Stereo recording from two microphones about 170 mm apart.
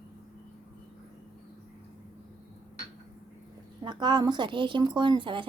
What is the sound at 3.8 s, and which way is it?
A woman's voice, 25° right (ahead or behind).